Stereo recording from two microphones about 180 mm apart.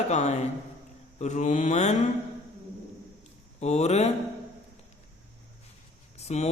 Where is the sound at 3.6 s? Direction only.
35° left (ahead or behind).